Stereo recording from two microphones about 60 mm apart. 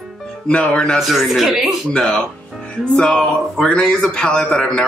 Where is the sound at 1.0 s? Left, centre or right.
Centre.